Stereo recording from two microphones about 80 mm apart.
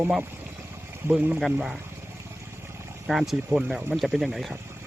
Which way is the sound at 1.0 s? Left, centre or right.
Right.